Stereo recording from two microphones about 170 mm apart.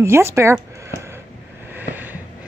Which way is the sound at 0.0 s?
15° right (ahead or behind).